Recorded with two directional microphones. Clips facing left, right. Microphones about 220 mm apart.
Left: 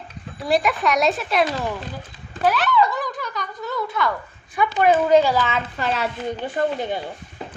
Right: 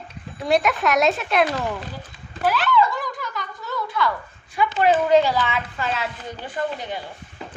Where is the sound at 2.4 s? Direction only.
20° left (ahead or behind).